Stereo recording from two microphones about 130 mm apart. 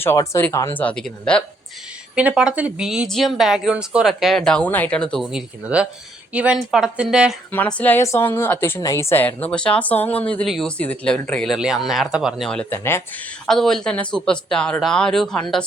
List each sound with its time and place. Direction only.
0.0 s speech: 20° left (ahead or behind)
0.8 s a woman's voice: 10° left (ahead or behind)
2.1 s speech: 5° right (ahead or behind)
7.5 s a woman's voice: 10° left (ahead or behind); by 12.5 s 5° right (ahead or behind)
12.5 s a woman's voice: 5° left (ahead or behind)